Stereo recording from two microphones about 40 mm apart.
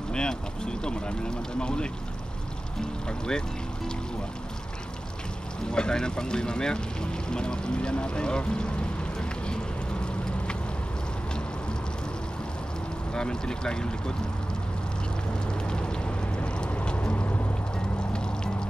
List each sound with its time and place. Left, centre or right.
0.1 s speech: left
3.1 s speech: centre
5.7 s speech: left
13.1 s speech: centre
15.7 s vehicle: left
16.9 s boat: left
18.1 s music: left